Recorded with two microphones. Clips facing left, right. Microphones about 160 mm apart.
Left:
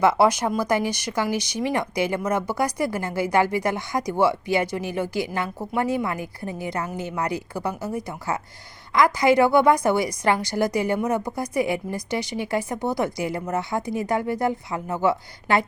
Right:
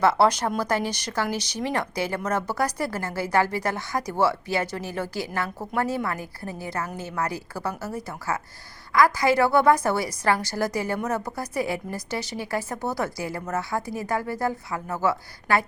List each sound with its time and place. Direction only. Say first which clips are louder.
0.0 s a woman's voice: left 2 dB; 15° left (ahead or behind)